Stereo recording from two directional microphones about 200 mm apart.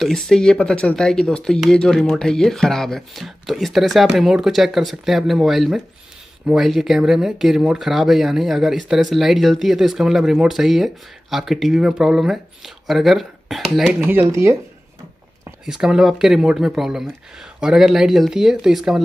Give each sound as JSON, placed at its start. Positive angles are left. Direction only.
{"t": 0.0, "sound": "speech", "side_deg": 0}
{"t": 15.6, "sound": "speech", "side_deg": -5}